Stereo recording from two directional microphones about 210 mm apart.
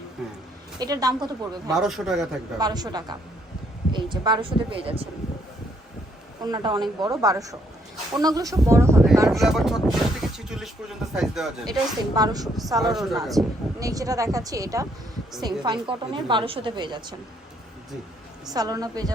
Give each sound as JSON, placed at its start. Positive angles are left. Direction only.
{"t": 0.8, "sound": "speech", "side_deg": -20}
{"t": 1.7, "sound": "a man's voice", "side_deg": 0}
{"t": 2.6, "sound": "a woman's voice", "side_deg": -20}
{"t": 6.4, "sound": "a woman's voice", "side_deg": -20}
{"t": 9.4, "sound": "speech", "side_deg": 0}
{"t": 11.6, "sound": "speech", "side_deg": -20}
{"t": 12.8, "sound": "a man's voice", "side_deg": 0}
{"t": 13.7, "sound": "a woman's voice", "side_deg": -15}
{"t": 18.4, "sound": "speech", "side_deg": -20}